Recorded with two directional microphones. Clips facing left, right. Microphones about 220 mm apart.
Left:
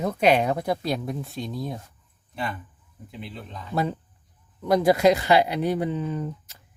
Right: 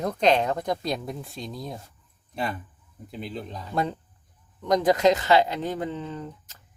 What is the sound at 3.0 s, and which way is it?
Speech, 40° right (ahead or behind).